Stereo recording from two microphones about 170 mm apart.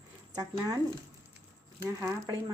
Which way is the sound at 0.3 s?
20° right (ahead or behind).